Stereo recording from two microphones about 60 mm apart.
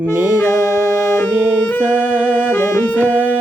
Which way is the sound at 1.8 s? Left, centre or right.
Right.